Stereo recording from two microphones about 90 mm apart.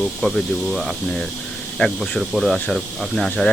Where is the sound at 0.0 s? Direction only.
Centre (ahead or behind).